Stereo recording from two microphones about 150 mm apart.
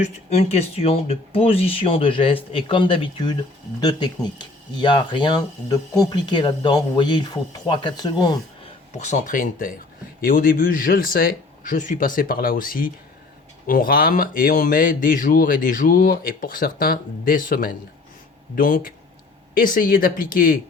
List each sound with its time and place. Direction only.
0.0 s speech: 45° left (ahead or behind)
8.9 s speech: 50° left (ahead or behind); by 20.6 s 70° left (ahead or behind)